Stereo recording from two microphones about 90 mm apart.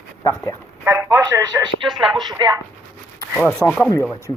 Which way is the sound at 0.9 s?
35° right (ahead or behind).